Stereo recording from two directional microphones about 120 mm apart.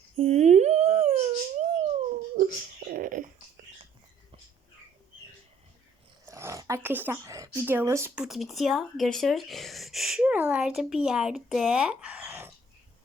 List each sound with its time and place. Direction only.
0.2 s humming: 70° right (ahead or behind)
2.8 s a sound: 90° right
6.2 s dog: 25° right (ahead or behind)
7.3 s speech: 30° right (ahead or behind)
8.1 s speech: 5° right (ahead or behind)